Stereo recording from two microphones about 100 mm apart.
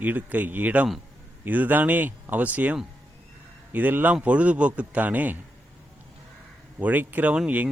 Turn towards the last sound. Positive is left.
turn(degrees=-15)  # may be behind; listen again after turning